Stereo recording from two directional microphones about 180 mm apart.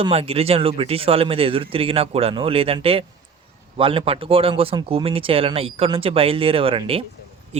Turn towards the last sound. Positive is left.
turn(degrees=-30)  # may be behind; listen again after turning